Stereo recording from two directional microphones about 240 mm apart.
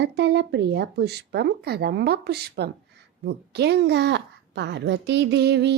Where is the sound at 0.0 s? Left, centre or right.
Right.